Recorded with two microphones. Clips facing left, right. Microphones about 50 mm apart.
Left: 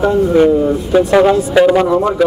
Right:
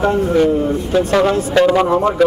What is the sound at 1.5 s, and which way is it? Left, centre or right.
Speech, centre.